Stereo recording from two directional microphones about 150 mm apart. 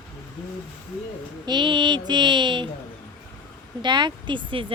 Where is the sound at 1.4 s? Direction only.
30° right (ahead or behind).